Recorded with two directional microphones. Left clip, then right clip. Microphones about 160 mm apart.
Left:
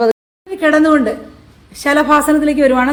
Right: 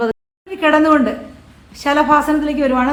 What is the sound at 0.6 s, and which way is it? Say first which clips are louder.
A woman's voice: left 1 dB; 20° left (ahead or behind).